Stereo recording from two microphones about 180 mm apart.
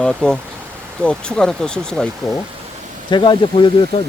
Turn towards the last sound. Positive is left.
turn(degrees=25)  # may be behind; listen again after turning